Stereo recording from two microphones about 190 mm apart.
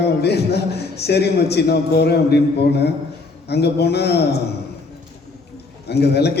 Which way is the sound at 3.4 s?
60° left (ahead or behind).